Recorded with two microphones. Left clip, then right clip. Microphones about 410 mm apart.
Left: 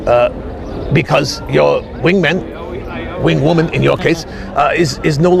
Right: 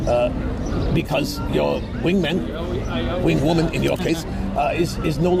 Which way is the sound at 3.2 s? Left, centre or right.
Left.